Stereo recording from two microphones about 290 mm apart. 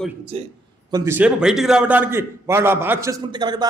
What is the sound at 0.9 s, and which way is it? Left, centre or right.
A man's voice, centre.